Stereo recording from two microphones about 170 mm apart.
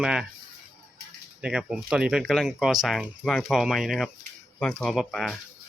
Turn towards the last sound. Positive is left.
turn(degrees=0)  # may be behind; listen again after turning